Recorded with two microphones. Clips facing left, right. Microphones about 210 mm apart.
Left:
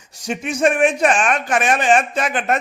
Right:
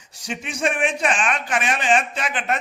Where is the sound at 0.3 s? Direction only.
45° left (ahead or behind).